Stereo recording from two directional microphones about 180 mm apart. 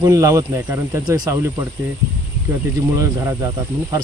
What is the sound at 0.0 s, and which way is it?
Speech, 20° right (ahead or behind).